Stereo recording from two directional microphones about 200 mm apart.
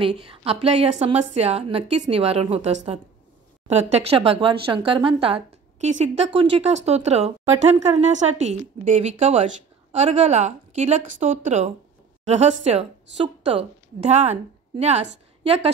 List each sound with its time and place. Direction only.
0.4 s a woman's voice: 30° right (ahead or behind)